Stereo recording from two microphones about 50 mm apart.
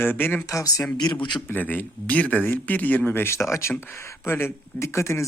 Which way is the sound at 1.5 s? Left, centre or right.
Left.